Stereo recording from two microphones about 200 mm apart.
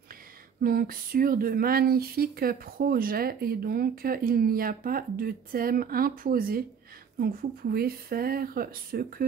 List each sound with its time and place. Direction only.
0.6 s speech: 45° right (ahead or behind)